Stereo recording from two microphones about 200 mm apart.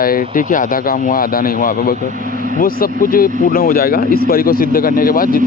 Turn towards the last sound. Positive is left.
turn(degrees=45)  # may be behind; listen again after turning